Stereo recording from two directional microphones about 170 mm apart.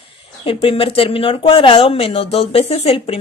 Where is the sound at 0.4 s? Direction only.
30° left (ahead or behind).